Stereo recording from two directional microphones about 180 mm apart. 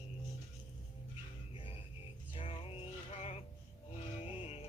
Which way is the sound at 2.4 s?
30° left (ahead or behind).